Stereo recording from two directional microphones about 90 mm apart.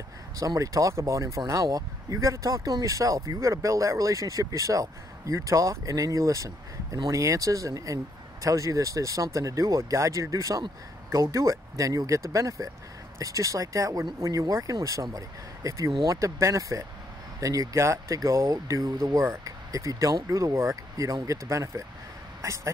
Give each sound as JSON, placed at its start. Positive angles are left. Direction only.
{"t": 0.4, "sound": "speech", "side_deg": -40}